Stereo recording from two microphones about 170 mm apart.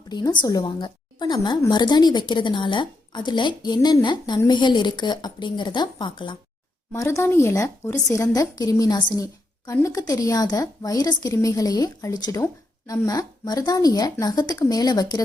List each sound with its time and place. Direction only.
0.1 s speech: 25° left (ahead or behind)